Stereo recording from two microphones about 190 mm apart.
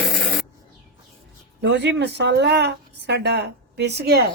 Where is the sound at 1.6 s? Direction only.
65° right (ahead or behind).